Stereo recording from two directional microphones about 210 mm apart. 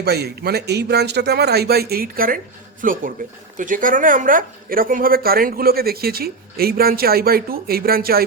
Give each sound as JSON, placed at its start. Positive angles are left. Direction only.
{"t": 0.0, "sound": "a man's voice", "side_deg": -50}